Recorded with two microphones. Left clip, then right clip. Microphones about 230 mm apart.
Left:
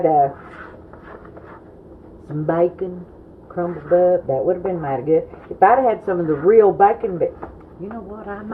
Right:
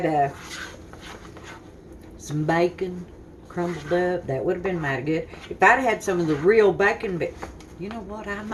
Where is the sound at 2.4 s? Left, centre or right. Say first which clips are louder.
Left 4 dB; right.